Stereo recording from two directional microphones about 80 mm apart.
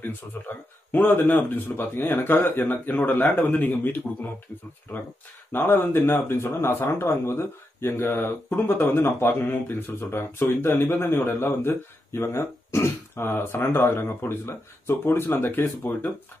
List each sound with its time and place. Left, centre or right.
0.3 s speech: left
5.5 s speech: left